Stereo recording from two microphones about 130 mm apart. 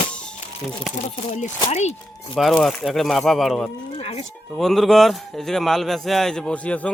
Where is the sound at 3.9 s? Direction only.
50° left (ahead or behind).